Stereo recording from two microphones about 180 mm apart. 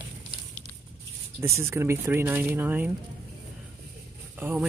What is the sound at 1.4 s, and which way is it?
Speech, 15° right (ahead or behind).